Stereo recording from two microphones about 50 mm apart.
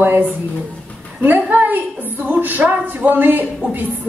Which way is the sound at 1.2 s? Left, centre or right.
Right.